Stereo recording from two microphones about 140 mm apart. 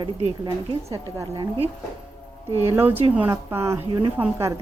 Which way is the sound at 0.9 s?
25° right (ahead or behind).